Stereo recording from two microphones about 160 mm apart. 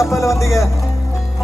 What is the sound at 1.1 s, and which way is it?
Music, centre (ahead or behind).